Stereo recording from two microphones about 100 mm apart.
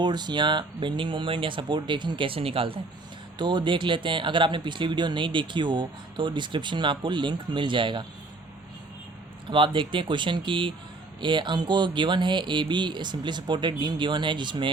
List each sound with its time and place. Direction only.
0.0 s speech: 45° right (ahead or behind); by 2.8 s 65° right (ahead or behind)
3.3 s speech: 50° right (ahead or behind)
9.5 s speech: 55° right (ahead or behind)